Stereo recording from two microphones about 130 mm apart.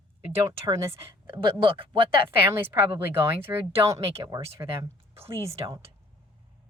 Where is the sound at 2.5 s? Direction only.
15° right (ahead or behind).